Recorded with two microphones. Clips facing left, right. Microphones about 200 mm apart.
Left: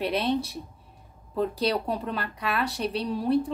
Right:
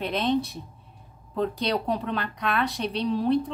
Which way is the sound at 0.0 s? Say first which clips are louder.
Right 1 dB; 10° left (ahead or behind).